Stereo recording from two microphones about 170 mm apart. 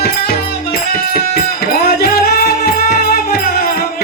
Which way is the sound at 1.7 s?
65° left (ahead or behind).